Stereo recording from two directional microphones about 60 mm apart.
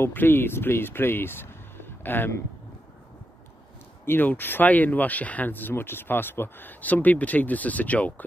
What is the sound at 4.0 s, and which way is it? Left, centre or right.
Speech, left.